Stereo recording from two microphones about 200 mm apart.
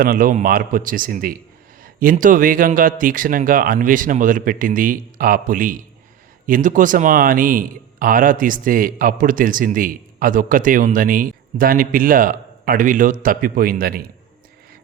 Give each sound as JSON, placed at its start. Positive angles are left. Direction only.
{"t": 0.0, "sound": "speech", "side_deg": -45}